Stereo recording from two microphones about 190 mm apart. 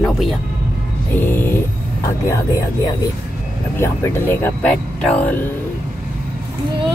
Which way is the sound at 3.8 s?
15° left (ahead or behind).